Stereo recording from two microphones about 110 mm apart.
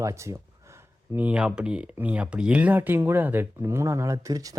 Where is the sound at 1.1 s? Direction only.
10° right (ahead or behind).